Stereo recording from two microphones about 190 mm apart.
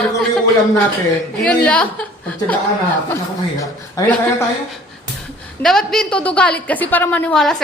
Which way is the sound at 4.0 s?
15° left (ahead or behind).